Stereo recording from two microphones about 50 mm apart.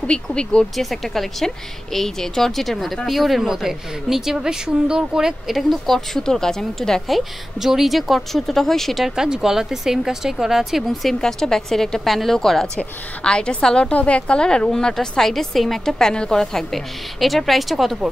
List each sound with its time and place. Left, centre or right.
0.0 s a woman's voice: centre
0.7 s a woman's voice: centre
5.6 s a woman's voice: centre
7.5 s a woman's voice: centre
8.9 s a woman's voice: centre
12.7 s a woman's voice: centre